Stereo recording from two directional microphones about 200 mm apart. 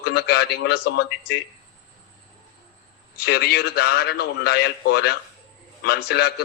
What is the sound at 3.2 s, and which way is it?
A man's voice, 55° left (ahead or behind).